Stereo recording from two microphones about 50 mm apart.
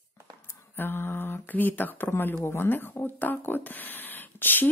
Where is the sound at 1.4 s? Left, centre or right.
Left.